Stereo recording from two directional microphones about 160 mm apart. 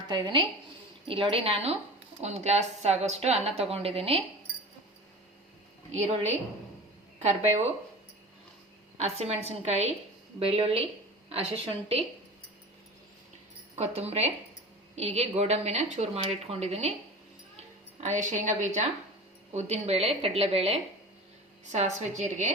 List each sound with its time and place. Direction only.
0.1 s a woman's voice: 30° right (ahead or behind)
5.9 s a woman's voice: 45° right (ahead or behind)
9.0 s speech: 40° right (ahead or behind)
13.7 s a woman's voice: 40° right (ahead or behind)